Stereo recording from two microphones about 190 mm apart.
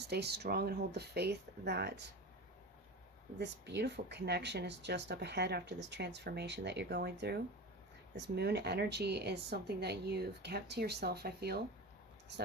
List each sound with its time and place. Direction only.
0.0 s speech: 60° right (ahead or behind)
3.3 s speech: 65° right (ahead or behind)